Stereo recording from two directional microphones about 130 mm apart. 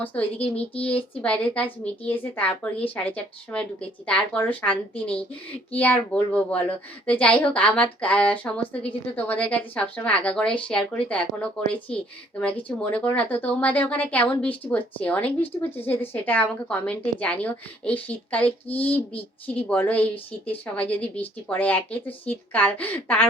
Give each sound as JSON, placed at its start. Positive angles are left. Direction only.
{"t": 0.0, "sound": "speech", "side_deg": 10}
{"t": 0.4, "sound": "speech", "side_deg": 50}
{"t": 1.2, "sound": "speech", "side_deg": 10}